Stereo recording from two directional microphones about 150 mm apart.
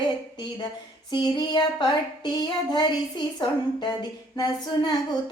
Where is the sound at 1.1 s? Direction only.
30° left (ahead or behind).